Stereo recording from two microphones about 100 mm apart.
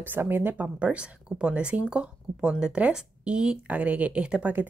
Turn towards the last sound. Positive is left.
turn(degrees=-15)  # may be behind; listen again after turning